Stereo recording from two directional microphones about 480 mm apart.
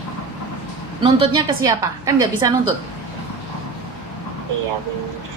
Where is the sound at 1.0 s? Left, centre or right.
Centre.